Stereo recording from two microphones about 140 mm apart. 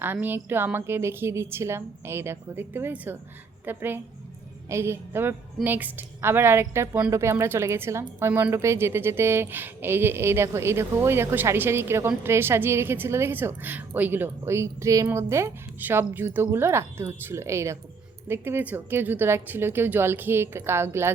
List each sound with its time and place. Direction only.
0.0 s speech: 15° right (ahead or behind)